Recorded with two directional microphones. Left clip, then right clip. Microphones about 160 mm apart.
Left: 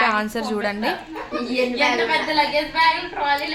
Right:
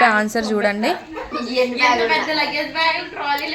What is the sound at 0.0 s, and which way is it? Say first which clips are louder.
Speech: right 5 dB; 25° right (ahead or behind).